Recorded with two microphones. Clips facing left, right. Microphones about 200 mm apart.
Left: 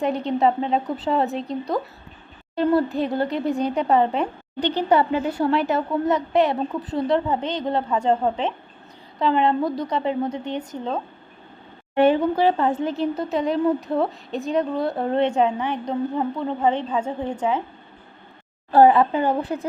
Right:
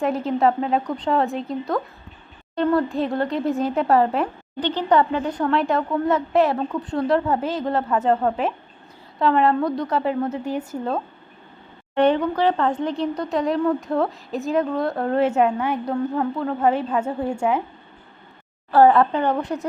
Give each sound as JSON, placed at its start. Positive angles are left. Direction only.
{"t": 0.0, "sound": "speech", "side_deg": 0}
{"t": 2.9, "sound": "speech", "side_deg": 0}
{"t": 4.6, "sound": "speech", "side_deg": 10}
{"t": 11.9, "sound": "a woman's voice", "side_deg": 10}
{"t": 18.7, "sound": "speech", "side_deg": 15}